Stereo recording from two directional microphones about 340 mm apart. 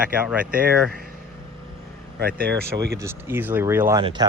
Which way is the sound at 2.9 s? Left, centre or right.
Centre.